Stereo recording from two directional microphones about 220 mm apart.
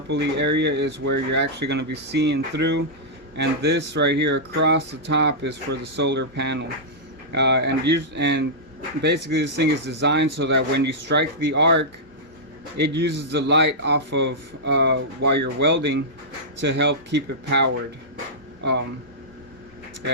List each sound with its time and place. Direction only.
0.1 s speech: 50° right (ahead or behind)